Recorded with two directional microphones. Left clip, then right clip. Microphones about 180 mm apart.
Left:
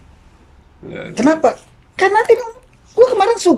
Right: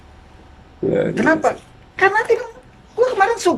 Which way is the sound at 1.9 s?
25° left (ahead or behind).